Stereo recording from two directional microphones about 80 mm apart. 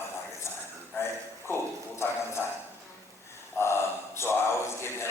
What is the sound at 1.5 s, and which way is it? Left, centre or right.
Speech, left.